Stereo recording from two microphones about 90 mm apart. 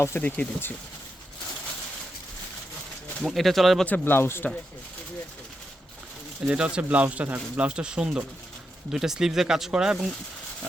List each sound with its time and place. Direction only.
0.0 s speech: 25° left (ahead or behind)
3.2 s speech: centre (ahead or behind)
3.8 s speech: 20° left (ahead or behind)
6.4 s speech: 10° right (ahead or behind)